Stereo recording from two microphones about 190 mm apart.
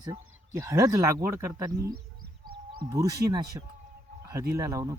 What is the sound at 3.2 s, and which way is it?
Speech, 20° right (ahead or behind).